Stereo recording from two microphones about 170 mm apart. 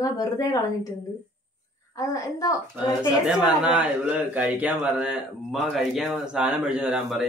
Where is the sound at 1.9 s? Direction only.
20° left (ahead or behind).